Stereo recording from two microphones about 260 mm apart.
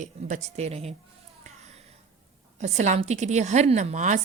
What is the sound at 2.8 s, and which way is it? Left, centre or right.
A woman's voice, right.